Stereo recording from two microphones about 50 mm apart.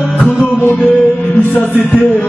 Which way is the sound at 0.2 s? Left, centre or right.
Centre.